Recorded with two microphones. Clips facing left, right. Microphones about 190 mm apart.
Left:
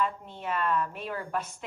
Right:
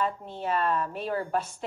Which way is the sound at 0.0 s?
35° right (ahead or behind).